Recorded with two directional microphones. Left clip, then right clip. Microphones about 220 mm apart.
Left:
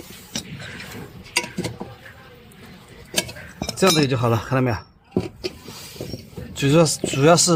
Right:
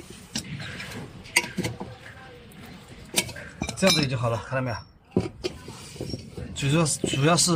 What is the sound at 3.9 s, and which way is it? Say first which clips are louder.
Speech: left 6 dB; 50° left (ahead or behind).